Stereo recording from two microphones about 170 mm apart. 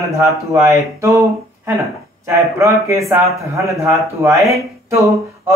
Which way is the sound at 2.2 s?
15° right (ahead or behind).